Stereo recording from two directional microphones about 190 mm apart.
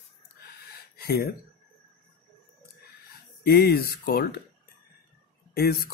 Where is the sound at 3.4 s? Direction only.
55° left (ahead or behind).